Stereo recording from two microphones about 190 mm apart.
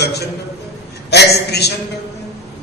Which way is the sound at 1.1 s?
60° left (ahead or behind).